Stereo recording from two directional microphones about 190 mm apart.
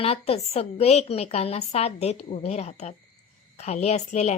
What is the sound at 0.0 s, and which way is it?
Speech, 30° left (ahead or behind).